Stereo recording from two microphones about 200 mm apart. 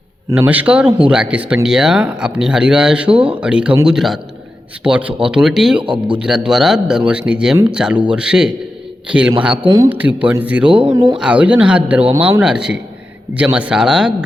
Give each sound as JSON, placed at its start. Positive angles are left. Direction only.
{"t": 0.3, "sound": "speech", "side_deg": -10}
{"t": 9.6, "sound": "speech", "side_deg": -20}
{"t": 9.9, "sound": "speech", "side_deg": -5}
{"t": 10.9, "sound": "speech", "side_deg": -20}
{"t": 11.2, "sound": "speech", "side_deg": -5}
{"t": 12.1, "sound": "speech", "side_deg": -15}
{"t": 12.4, "sound": "speech", "side_deg": -5}